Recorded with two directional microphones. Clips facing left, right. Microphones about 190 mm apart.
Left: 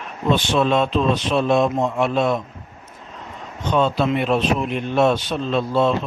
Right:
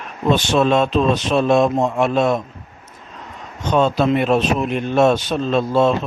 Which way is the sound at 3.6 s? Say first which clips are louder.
Right 3 dB; 40° right (ahead or behind).